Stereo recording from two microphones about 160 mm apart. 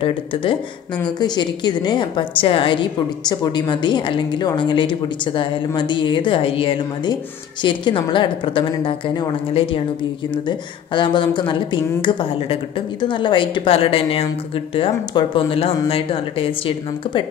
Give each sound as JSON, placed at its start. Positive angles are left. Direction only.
{"t": 0.0, "sound": "a woman's voice", "side_deg": 30}